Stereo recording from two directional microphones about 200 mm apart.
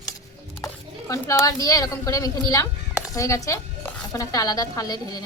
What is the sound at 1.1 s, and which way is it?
A woman's voice, 15° left (ahead or behind).